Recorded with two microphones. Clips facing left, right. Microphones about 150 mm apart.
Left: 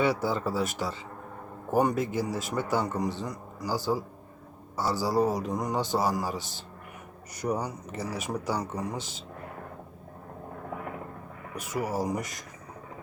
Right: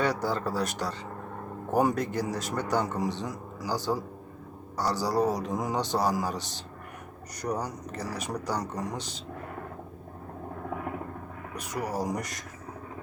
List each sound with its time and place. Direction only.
0.0 s a man's voice: 5° left (ahead or behind)
4.8 s a man's voice: 5° left (ahead or behind)
9.0 s speech: 50° left (ahead or behind)
11.7 s a man's voice: 5° left (ahead or behind)